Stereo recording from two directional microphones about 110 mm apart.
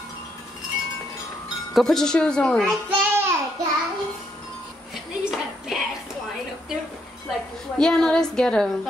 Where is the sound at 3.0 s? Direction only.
20° right (ahead or behind).